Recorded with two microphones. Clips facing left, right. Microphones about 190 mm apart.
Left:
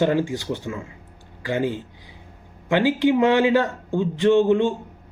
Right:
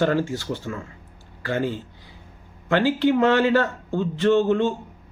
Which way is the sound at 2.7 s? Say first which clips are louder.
Left 1 dB; 15° left (ahead or behind).